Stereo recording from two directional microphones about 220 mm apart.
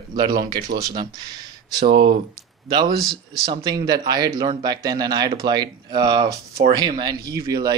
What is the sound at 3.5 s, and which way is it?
Speech, 20° right (ahead or behind).